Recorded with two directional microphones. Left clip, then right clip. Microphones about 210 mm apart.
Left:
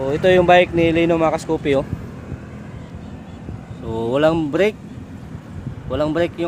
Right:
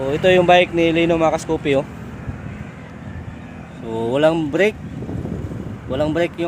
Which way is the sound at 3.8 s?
Centre (ahead or behind).